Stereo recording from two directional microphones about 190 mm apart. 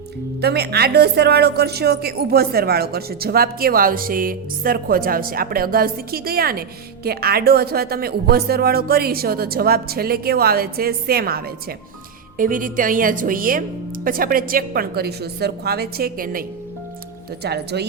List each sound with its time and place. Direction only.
0.4 s speech: 60° right (ahead or behind)
17.4 s speech: 60° right (ahead or behind)